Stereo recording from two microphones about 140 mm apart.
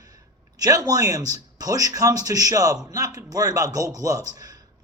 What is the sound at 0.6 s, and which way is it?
A man's voice, 25° right (ahead or behind).